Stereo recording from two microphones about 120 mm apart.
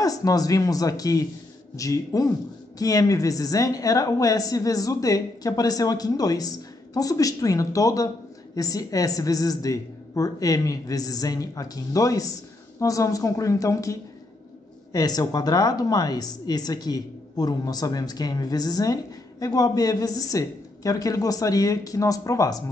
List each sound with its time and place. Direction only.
0.0 s a woman's voice: 30° left (ahead or behind)